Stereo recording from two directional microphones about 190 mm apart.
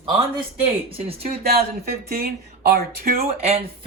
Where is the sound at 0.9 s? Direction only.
30° right (ahead or behind).